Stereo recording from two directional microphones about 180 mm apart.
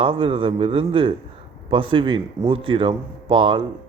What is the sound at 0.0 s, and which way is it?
Speech, 30° right (ahead or behind).